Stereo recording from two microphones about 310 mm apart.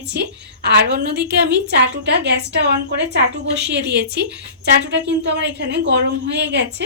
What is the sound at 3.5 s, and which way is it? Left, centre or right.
A woman's voice, right.